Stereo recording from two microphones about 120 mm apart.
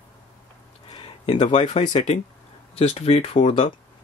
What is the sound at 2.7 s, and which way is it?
Speech, 60° left (ahead or behind).